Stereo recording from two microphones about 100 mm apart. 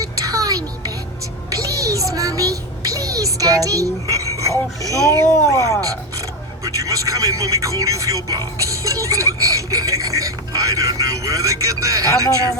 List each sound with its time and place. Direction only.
0.0 s music: 35° right (ahead or behind)
1.5 s a sound: 35° right (ahead or behind)
4.8 s speech: 35° right (ahead or behind)
6.7 s speech: 35° right (ahead or behind)